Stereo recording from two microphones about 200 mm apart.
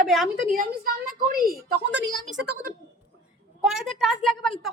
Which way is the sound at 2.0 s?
65° right (ahead or behind).